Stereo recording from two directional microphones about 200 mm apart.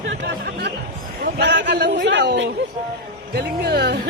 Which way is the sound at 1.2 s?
55° right (ahead or behind).